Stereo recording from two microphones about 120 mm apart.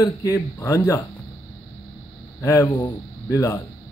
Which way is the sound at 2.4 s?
30° left (ahead or behind).